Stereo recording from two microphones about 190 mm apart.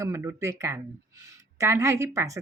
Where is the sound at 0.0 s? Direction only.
15° right (ahead or behind).